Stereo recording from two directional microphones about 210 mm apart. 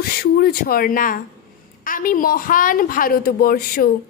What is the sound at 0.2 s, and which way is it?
A woman's voice, 45° left (ahead or behind).